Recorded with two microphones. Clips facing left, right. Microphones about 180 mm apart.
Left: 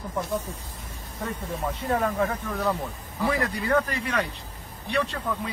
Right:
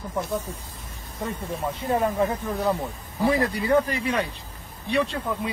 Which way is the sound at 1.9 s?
20° right (ahead or behind).